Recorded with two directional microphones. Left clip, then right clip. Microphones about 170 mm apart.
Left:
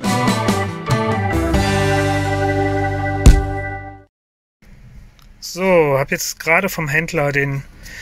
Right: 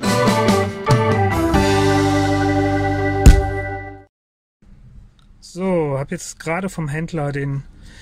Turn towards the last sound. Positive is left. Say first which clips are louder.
# left 5 dB
turn(degrees=-25)  # may be behind; listen again after turning